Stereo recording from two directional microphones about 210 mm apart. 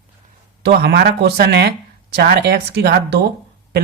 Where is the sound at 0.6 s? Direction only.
50° right (ahead or behind).